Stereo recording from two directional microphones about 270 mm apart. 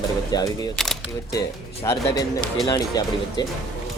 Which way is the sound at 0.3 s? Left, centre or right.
Centre.